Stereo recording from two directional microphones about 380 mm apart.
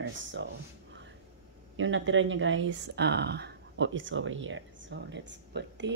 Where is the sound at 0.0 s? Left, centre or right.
Right.